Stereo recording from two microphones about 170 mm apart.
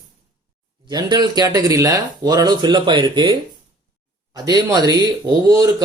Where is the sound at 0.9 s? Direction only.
25° right (ahead or behind).